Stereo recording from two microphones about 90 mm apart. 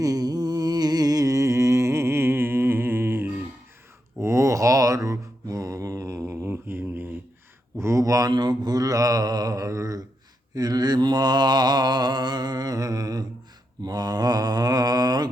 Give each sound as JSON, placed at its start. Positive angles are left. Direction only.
{"t": 0.0, "sound": "music", "side_deg": -45}
{"t": 4.2, "sound": "mantra", "side_deg": -35}
{"t": 7.8, "sound": "a sound", "side_deg": -35}
{"t": 8.3, "sound": "mantra", "side_deg": -50}